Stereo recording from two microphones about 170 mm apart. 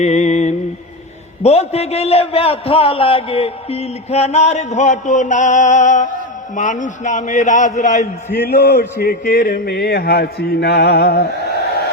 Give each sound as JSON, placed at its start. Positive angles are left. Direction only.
{"t": 0.0, "sound": "mantra", "side_deg": 45}
{"t": 1.4, "sound": "a man's voice", "side_deg": 40}
{"t": 8.3, "sound": "speech", "side_deg": 75}